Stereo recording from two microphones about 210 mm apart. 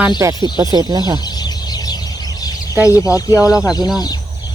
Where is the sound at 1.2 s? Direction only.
20° left (ahead or behind).